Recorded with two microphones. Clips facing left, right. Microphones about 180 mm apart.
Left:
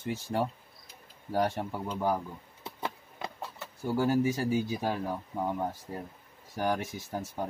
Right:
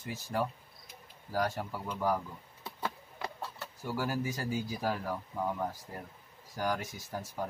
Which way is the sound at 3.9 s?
25° left (ahead or behind).